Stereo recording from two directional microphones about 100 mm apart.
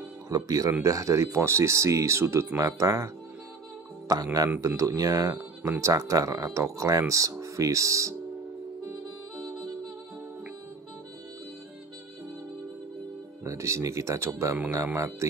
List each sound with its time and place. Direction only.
0.3 s speech: 40° right (ahead or behind)
4.1 s speech: 40° right (ahead or behind)
13.4 s speech: 30° right (ahead or behind)